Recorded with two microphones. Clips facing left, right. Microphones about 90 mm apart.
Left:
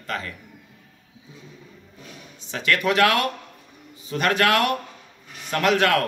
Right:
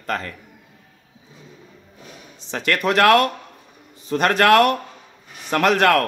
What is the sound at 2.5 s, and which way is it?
Speech, 40° right (ahead or behind).